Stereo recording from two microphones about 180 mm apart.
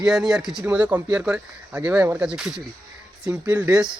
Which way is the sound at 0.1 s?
Centre (ahead or behind).